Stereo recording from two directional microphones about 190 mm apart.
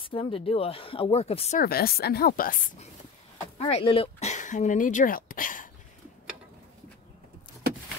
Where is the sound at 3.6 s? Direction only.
30° left (ahead or behind); by 5.6 s 45° left (ahead or behind).